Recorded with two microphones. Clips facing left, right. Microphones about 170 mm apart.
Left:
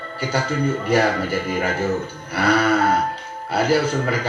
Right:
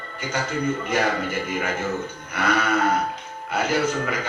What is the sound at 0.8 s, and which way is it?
Speech, 35° left (ahead or behind).